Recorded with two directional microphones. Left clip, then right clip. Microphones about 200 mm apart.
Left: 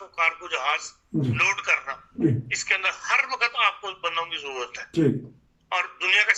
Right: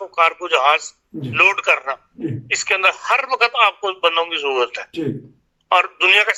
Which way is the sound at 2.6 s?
50° right (ahead or behind).